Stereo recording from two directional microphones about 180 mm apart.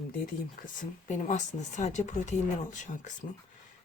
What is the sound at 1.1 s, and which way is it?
Speech, 40° left (ahead or behind).